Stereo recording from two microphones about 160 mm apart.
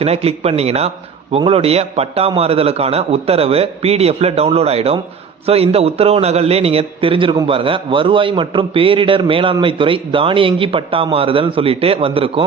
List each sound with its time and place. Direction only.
0.0 s a man's voice: 40° right (ahead or behind)